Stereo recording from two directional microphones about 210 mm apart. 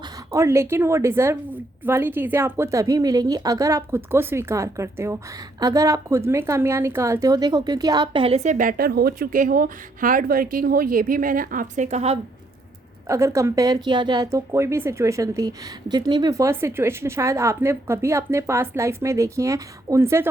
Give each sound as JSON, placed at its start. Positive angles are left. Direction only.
{"t": 0.3, "sound": "a woman's voice", "side_deg": -10}
{"t": 13.1, "sound": "speech", "side_deg": -15}